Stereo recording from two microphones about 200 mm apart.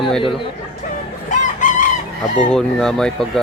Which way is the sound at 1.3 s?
40° left (ahead or behind).